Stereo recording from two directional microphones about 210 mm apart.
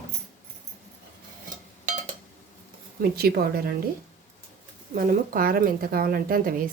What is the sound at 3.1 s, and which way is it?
Speech, 45° right (ahead or behind).